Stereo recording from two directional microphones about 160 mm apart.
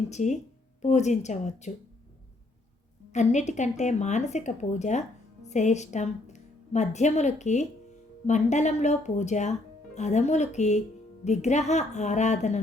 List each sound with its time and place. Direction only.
0.1 s speech: 45° left (ahead or behind)
3.1 s a woman's voice: 45° left (ahead or behind)